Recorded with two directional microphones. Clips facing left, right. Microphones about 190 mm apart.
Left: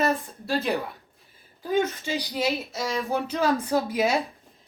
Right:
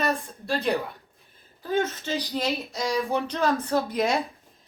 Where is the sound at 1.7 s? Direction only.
10° left (ahead or behind).